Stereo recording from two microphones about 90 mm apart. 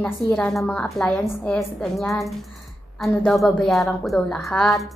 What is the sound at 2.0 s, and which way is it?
Speech, centre (ahead or behind).